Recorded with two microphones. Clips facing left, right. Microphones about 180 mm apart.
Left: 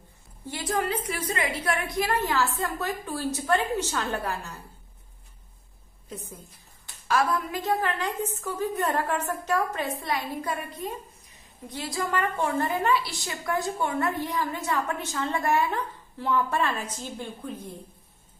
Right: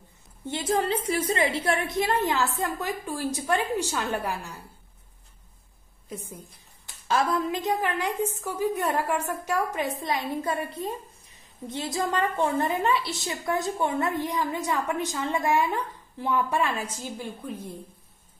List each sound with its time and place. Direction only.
0.5 s a woman's voice: 25° right (ahead or behind)
7.1 s a woman's voice: 25° right (ahead or behind)